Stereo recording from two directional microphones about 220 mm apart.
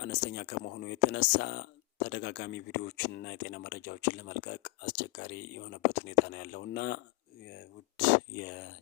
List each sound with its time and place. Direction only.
0.0 s speech: 45° left (ahead or behind)